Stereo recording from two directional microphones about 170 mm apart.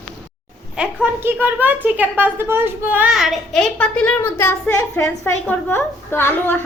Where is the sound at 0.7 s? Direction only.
10° right (ahead or behind).